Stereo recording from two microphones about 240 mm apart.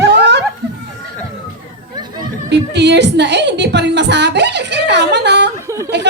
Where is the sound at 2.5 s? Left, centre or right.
Right.